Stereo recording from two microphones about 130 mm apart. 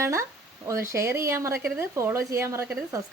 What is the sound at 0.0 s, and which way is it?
Speech, 20° right (ahead or behind).